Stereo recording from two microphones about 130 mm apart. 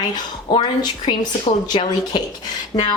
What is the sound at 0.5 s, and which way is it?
Speech, 35° left (ahead or behind).